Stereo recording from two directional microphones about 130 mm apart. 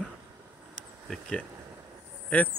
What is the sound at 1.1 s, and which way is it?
Speech, 5° left (ahead or behind).